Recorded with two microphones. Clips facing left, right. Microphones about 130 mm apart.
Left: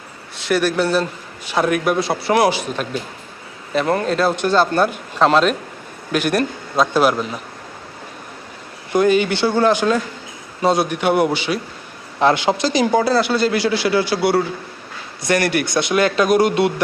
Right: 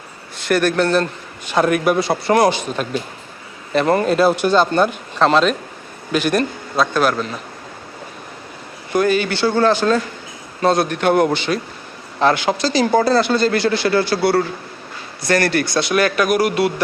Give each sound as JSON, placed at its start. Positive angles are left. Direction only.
{"t": 0.3, "sound": "speech", "side_deg": 0}
{"t": 8.9, "sound": "speech", "side_deg": 20}
{"t": 12.2, "sound": "speech", "side_deg": 25}